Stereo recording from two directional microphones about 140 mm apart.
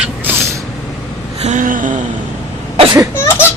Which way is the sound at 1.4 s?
60° right (ahead or behind).